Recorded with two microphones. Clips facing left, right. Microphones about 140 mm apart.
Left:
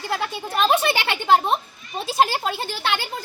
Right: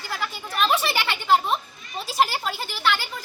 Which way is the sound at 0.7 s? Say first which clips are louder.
Left 4 dB; 60° left (ahead or behind).